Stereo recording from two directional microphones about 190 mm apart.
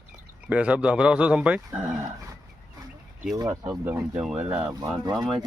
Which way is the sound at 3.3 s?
20° right (ahead or behind).